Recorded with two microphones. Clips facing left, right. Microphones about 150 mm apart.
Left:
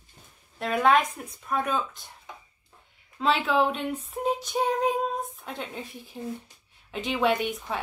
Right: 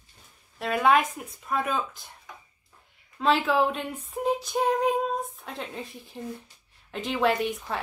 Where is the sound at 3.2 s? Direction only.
Centre (ahead or behind).